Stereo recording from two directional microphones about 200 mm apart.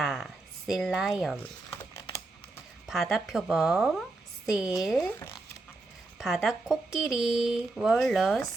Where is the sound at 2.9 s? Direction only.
Centre (ahead or behind).